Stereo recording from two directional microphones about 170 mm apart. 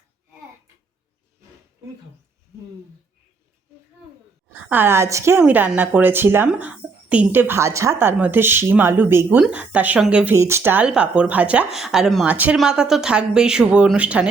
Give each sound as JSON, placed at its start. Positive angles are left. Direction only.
{"t": 4.4, "sound": "a woman's voice", "side_deg": -10}